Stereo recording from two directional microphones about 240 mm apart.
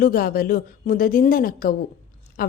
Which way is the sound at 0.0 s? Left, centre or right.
Left.